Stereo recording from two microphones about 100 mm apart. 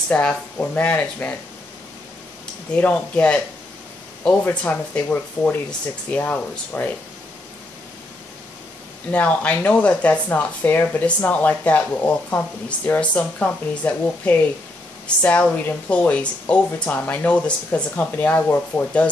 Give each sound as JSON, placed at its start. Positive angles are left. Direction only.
{"t": 0.1, "sound": "speech", "side_deg": 15}
{"t": 2.7, "sound": "speech", "side_deg": 15}
{"t": 4.5, "sound": "speech", "side_deg": 20}
{"t": 9.1, "sound": "speech", "side_deg": 15}